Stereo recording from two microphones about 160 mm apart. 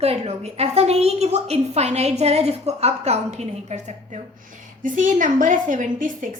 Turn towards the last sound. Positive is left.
turn(degrees=-55)  # may be behind; listen again after turning